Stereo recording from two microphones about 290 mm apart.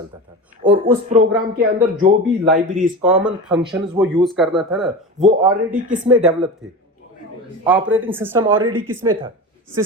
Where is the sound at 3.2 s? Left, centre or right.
Centre.